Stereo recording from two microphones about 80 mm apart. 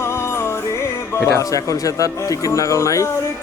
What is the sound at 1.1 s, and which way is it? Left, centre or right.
Speech, left.